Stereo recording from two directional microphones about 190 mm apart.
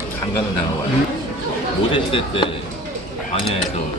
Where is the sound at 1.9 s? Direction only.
25° left (ahead or behind).